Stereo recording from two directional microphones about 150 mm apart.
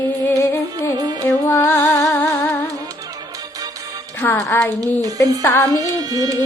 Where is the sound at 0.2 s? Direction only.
20° left (ahead or behind).